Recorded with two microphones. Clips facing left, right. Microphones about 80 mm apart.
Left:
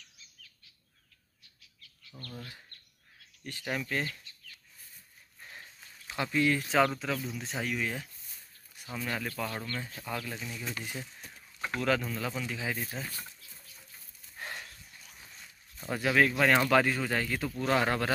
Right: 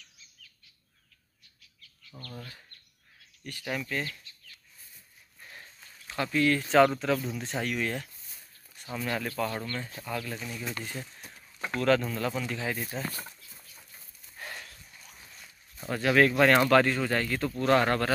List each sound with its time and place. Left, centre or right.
3.5 s speech: left
5.6 s a sound: centre
6.6 s speech: centre
10.0 s speech: centre
12.1 s speech: centre
13.0 s speech: right
14.4 s dog: left
15.9 s speech: centre